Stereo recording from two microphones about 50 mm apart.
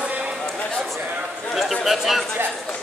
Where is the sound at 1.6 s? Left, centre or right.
Centre.